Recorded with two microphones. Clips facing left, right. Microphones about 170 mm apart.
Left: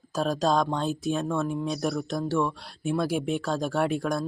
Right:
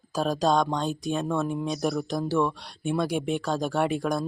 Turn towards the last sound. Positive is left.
turn(degrees=0)  # may be behind; listen again after turning